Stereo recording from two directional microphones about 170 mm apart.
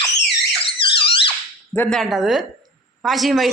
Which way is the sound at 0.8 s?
30° left (ahead or behind).